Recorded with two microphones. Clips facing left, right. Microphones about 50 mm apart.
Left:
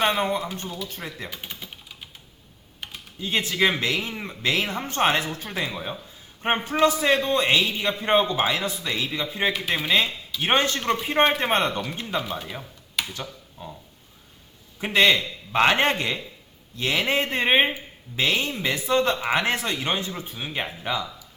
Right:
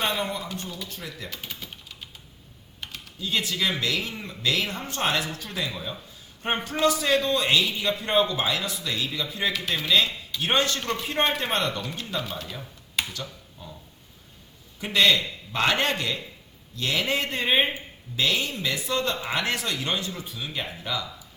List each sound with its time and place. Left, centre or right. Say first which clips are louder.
0.0 s a man's voice: left 5 dB; left
1.3 s typewriter: left 1 dB; centre
3.2 s a man's voice: left 4 dB; left
14.8 s a man's voice: left 2 dB; left